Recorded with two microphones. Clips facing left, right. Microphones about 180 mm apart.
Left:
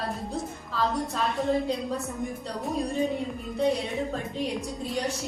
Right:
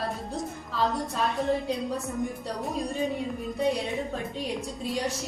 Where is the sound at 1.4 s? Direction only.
Centre (ahead or behind).